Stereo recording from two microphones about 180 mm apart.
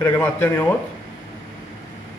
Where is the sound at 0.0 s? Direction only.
15° left (ahead or behind).